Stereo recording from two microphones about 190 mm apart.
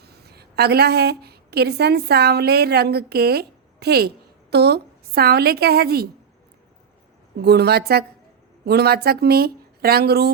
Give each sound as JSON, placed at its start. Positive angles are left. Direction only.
{"t": 0.0, "sound": "a woman's voice", "side_deg": -55}
{"t": 7.4, "sound": "a woman's voice", "side_deg": -60}